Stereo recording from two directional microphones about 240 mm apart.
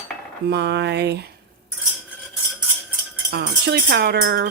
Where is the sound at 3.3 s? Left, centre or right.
Right.